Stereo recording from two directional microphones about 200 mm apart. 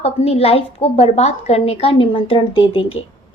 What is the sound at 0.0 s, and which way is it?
A woman's voice, 30° left (ahead or behind).